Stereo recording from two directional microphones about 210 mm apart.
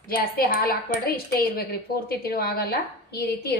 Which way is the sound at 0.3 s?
45° left (ahead or behind).